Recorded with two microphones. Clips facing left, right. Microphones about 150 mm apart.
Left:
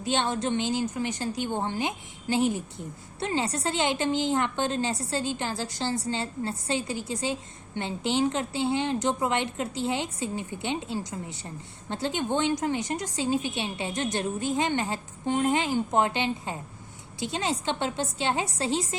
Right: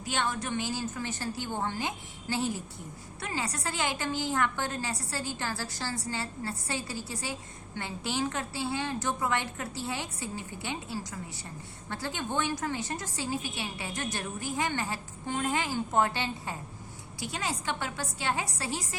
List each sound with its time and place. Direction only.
0.0 s a woman's voice: 25° left (ahead or behind)